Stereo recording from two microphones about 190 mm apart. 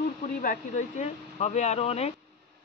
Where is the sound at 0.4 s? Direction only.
45° left (ahead or behind).